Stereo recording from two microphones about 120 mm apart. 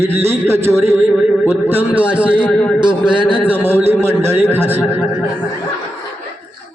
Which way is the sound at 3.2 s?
15° right (ahead or behind).